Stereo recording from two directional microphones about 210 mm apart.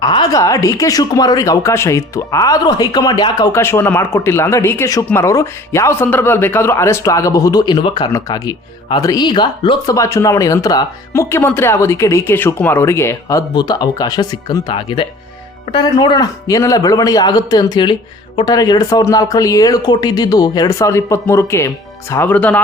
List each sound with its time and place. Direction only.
0.0 s speech: 20° left (ahead or behind)